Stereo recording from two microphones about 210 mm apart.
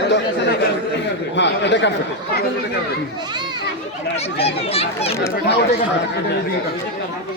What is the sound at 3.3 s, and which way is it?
Children playing, 20° right (ahead or behind).